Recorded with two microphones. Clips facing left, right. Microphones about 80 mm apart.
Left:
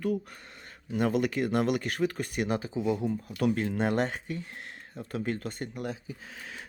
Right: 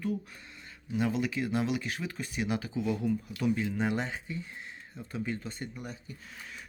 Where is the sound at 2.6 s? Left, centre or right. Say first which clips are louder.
Left 3 dB; left.